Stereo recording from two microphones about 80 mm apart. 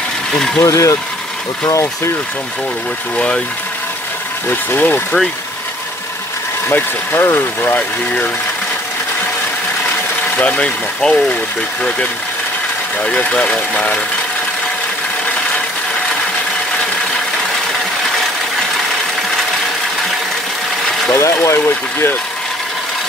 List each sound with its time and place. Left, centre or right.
0.6 s speech: left
3.2 s speech: centre
4.5 s speech: left
6.7 s speech: left
10.3 s speech: centre
13.0 s speech: centre
21.1 s speech: left